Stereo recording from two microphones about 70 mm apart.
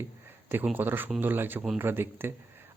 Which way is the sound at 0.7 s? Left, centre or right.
Right.